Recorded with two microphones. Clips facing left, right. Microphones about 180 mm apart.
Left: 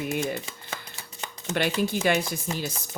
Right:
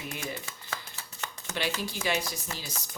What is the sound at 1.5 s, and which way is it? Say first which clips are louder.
Speech: left 8 dB; 55° left (ahead or behind).